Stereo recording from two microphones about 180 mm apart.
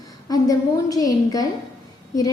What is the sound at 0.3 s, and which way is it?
A woman's voice, 20° left (ahead or behind).